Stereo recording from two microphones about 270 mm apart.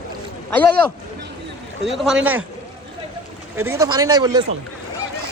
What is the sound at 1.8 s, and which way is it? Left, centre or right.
Speech, centre.